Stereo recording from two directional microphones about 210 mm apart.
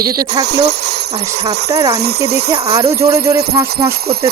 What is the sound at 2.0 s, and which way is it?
Speech, 50° right (ahead or behind).